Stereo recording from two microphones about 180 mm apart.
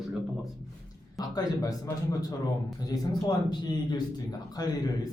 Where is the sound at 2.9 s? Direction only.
25° left (ahead or behind).